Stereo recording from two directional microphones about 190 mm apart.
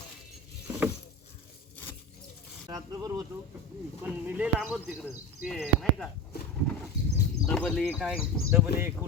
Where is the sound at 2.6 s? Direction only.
20° right (ahead or behind).